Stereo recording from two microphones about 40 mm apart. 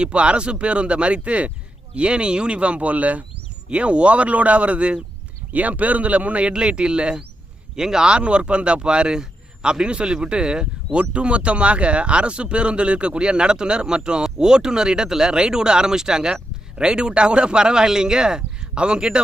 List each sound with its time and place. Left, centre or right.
0.0 s speech: right
6.5 s speech: right